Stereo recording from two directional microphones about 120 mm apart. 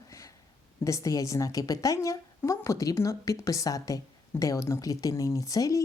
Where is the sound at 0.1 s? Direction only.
25° left (ahead or behind).